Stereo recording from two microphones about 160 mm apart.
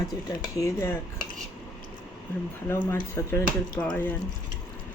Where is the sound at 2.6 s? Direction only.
15° left (ahead or behind).